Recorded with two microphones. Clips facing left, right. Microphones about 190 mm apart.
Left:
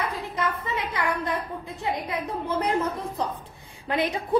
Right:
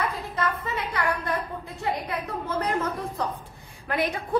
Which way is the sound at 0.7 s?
20° left (ahead or behind).